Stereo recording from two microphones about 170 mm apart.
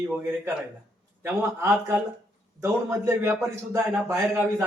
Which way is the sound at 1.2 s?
15° right (ahead or behind).